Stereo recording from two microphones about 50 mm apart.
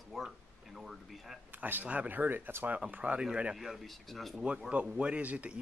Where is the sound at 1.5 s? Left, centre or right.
Right.